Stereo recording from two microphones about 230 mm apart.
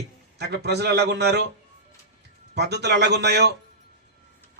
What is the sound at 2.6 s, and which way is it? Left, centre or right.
Speech, right.